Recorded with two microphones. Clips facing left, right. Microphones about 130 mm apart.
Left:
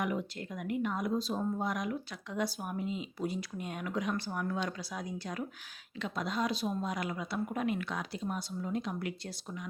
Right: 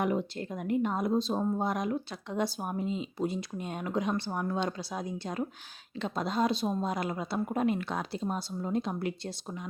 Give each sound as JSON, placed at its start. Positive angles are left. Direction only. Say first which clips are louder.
{"t": 0.0, "sound": "speech", "louder": "right 5 dB", "side_deg": -30}